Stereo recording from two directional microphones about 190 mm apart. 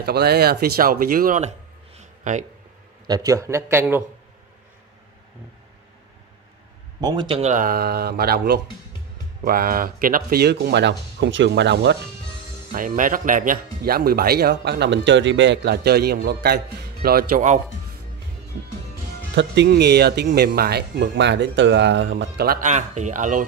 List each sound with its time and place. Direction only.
0.0 s speech: 55° right (ahead or behind)
2.0 s a sound: 40° right (ahead or behind)
3.1 s speech: 20° right (ahead or behind)
7.0 s speech: 20° right (ahead or behind); by 12.0 s 65° right (ahead or behind)
12.7 s speech: 45° right (ahead or behind)
19.3 s speech: 65° right (ahead or behind); by 23.4 s 40° right (ahead or behind)